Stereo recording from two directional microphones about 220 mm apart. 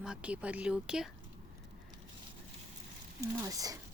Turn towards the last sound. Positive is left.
turn(degrees=-15)  # may be behind; listen again after turning